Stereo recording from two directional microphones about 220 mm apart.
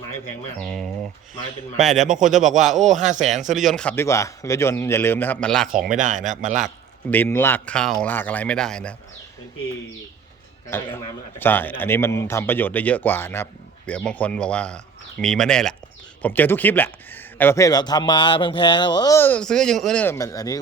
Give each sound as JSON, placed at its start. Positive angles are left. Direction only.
{"t": 0.6, "sound": "speech", "side_deg": 5}
{"t": 2.8, "sound": "a man's voice", "side_deg": -35}
{"t": 3.5, "sound": "a man's voice", "side_deg": 0}
{"t": 5.9, "sound": "a man's voice", "side_deg": -35}
{"t": 7.1, "sound": "a man's voice", "side_deg": 10}
{"t": 10.7, "sound": "a man's voice", "side_deg": 10}